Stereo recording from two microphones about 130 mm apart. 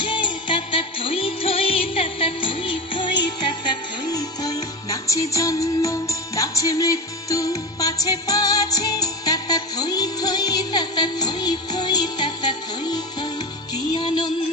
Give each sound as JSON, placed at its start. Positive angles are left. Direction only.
{"t": 0.0, "sound": "music", "side_deg": 40}
{"t": 3.7, "sound": "music", "side_deg": 30}